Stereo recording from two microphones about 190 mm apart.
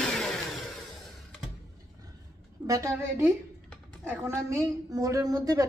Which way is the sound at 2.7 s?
15° right (ahead or behind).